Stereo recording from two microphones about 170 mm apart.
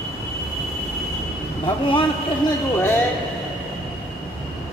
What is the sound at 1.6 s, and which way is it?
Speech, 30° left (ahead or behind).